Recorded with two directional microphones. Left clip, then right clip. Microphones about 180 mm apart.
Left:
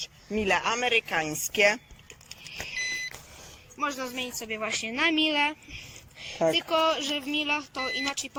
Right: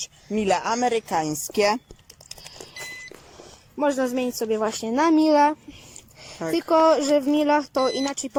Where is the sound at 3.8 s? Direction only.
60° right (ahead or behind).